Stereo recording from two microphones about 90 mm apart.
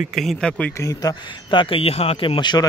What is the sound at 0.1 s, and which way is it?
Speech, 5° left (ahead or behind).